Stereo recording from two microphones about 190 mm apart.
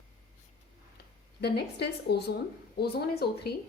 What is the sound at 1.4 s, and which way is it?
A woman's voice, 60° left (ahead or behind).